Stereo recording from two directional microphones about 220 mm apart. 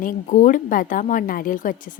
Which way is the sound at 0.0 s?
35° left (ahead or behind).